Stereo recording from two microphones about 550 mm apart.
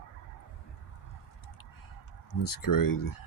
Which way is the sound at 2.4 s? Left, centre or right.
Left.